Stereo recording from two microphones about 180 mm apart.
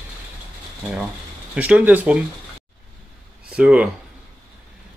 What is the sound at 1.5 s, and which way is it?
Speech, 5° right (ahead or behind).